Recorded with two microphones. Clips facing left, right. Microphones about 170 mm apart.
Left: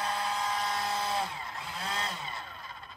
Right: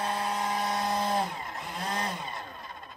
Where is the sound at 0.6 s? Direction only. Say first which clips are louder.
Right 4 dB; 50° right (ahead or behind).